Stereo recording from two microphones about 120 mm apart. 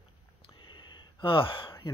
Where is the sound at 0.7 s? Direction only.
45° left (ahead or behind).